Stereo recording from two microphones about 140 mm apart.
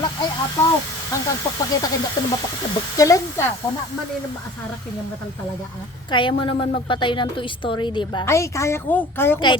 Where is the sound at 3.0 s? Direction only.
25° left (ahead or behind).